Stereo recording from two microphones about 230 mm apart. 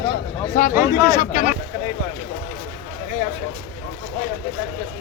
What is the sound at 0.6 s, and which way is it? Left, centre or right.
Speech, left.